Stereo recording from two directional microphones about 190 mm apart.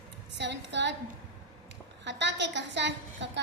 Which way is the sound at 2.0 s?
65° right (ahead or behind).